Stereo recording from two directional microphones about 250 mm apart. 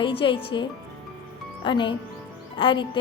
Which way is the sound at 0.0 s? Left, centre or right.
Left.